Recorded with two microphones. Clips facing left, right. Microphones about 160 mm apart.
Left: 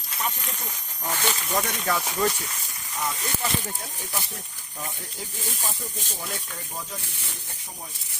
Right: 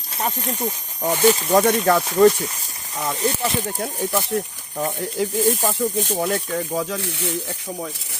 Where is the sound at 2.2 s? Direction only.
50° right (ahead or behind).